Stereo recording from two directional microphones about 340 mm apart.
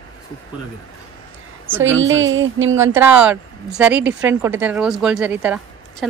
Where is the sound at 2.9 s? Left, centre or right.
Centre.